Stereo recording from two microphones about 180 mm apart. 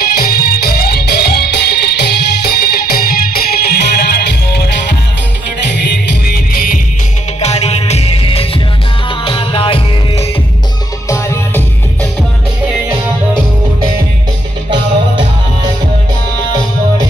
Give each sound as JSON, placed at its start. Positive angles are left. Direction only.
{"t": 0.0, "sound": "music", "side_deg": 55}
{"t": 5.9, "sound": "music", "side_deg": 55}
{"t": 7.3, "sound": "music", "side_deg": 35}
{"t": 11.1, "sound": "music", "side_deg": 15}